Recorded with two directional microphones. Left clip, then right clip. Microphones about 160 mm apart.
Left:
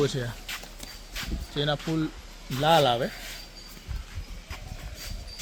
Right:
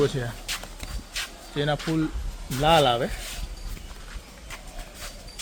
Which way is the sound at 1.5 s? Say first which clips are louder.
Right 2 dB; 65° left (ahead or behind).